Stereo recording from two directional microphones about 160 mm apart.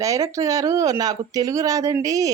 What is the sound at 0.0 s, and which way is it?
Speech, 20° right (ahead or behind).